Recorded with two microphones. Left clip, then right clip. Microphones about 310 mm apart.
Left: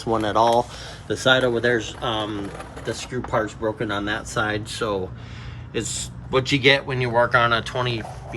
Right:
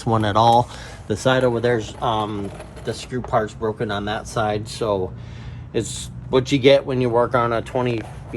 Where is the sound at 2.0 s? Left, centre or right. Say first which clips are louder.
Right 4 dB; right.